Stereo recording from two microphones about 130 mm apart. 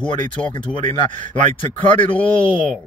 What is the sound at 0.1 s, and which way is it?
A man's voice, 40° left (ahead or behind).